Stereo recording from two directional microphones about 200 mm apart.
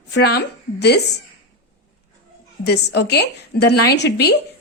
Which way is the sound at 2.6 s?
60° left (ahead or behind).